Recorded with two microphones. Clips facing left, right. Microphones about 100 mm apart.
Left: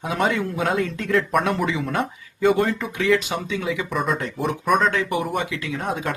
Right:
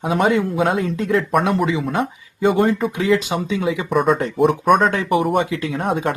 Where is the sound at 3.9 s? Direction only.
Centre (ahead or behind).